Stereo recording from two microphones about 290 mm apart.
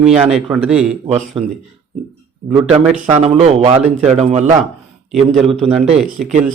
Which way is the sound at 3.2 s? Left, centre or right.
Right.